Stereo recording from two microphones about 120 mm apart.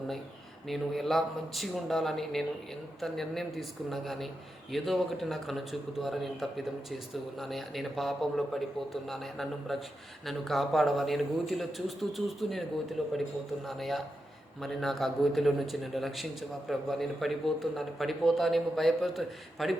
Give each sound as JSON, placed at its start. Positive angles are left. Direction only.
{"t": 0.7, "sound": "a man's voice", "side_deg": 0}